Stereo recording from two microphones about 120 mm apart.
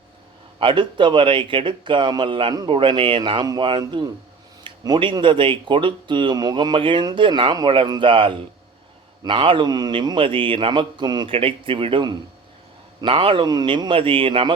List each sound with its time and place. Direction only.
0.6 s speech: 40° right (ahead or behind)
11.3 s speech: 50° right (ahead or behind)